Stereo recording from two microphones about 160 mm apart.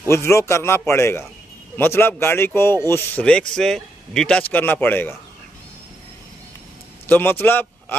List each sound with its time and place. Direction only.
0.1 s a man's voice: 15° left (ahead or behind)
7.1 s speech: 15° left (ahead or behind)